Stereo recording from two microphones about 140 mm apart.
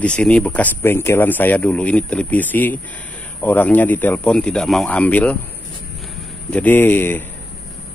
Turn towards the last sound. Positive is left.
turn(degrees=15)  # may be behind; listen again after turning